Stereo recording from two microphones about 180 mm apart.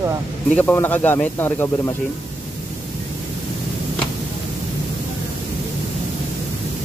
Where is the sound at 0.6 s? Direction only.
10° left (ahead or behind).